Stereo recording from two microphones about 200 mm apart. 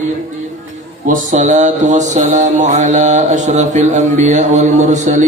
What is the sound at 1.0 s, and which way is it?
Speech, 40° right (ahead or behind).